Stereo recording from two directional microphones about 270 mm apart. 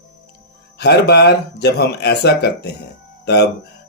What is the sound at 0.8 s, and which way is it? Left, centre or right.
Speech, left.